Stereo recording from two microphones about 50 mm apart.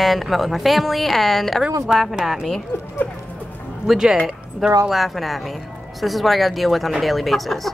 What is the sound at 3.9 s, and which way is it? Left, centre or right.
Speech, centre.